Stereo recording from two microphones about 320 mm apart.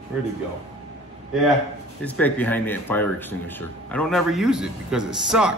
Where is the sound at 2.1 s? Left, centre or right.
Centre.